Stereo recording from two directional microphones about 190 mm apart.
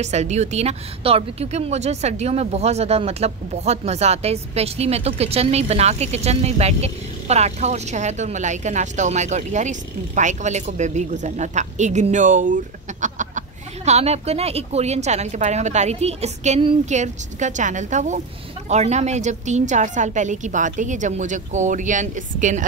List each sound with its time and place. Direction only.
0.0 s speech: 35° right (ahead or behind)
13.0 s a sound: 40° right (ahead or behind)
13.8 s speech: 35° right (ahead or behind)